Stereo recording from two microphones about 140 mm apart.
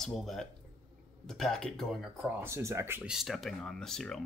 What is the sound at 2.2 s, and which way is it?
Speech, 20° right (ahead or behind).